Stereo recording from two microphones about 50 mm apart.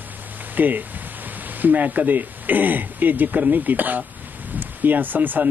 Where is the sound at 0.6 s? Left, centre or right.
Right.